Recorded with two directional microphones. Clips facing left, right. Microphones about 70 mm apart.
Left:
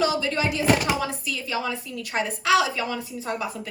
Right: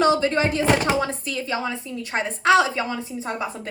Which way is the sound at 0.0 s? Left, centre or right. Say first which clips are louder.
Right 5 dB; right.